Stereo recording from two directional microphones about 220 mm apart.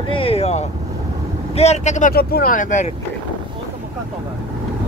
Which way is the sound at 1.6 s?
30° left (ahead or behind).